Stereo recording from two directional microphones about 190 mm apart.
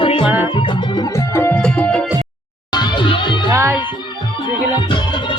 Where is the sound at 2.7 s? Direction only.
25° left (ahead or behind).